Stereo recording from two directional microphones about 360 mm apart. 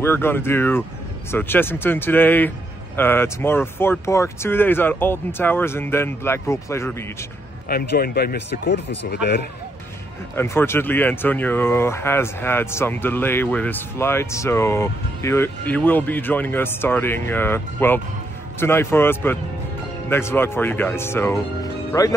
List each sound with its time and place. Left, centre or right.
0.0 s speech: centre
7.6 s speech: left
10.3 s speech: centre